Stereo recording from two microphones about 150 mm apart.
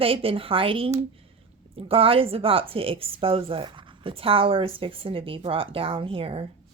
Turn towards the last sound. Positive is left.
turn(degrees=-40)  # may be behind; listen again after turning